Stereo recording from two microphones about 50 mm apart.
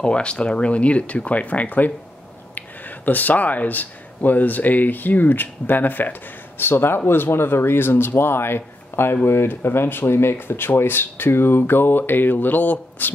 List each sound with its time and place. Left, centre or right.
0.0 s speech: left
6.6 s speech: left